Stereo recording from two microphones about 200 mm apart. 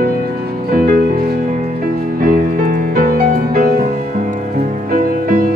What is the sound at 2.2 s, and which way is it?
Music, 45° right (ahead or behind).